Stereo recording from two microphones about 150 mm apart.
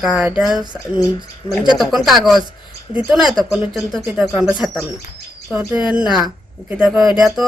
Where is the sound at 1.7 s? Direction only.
Centre (ahead or behind).